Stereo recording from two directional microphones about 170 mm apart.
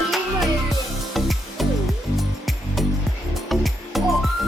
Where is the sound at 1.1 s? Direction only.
Centre (ahead or behind).